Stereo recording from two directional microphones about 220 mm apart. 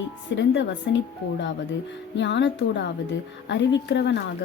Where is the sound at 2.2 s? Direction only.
55° left (ahead or behind).